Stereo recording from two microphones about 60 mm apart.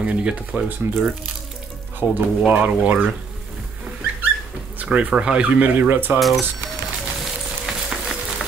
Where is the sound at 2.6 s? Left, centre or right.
Right.